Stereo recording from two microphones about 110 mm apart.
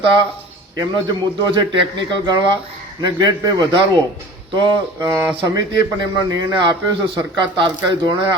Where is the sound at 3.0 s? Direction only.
45° right (ahead or behind).